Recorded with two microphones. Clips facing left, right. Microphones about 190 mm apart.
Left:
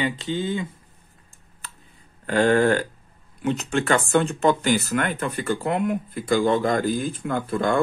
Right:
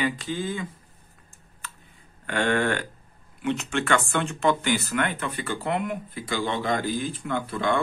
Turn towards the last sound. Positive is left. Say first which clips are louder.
# left 3 dB
turn(degrees=45)  # may be behind; listen again after turning